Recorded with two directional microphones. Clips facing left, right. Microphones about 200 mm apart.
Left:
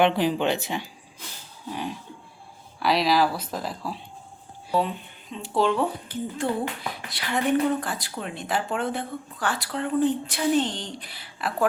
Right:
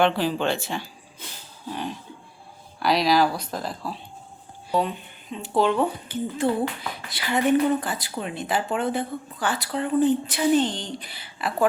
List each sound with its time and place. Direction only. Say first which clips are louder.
0.0 s speech: left 1 dB; 20° left (ahead or behind); by 11.5 s centre (ahead or behind)